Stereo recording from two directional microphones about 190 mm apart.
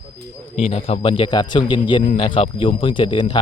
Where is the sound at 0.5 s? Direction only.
30° left (ahead or behind).